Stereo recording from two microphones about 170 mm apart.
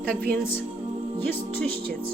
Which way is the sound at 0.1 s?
60° right (ahead or behind).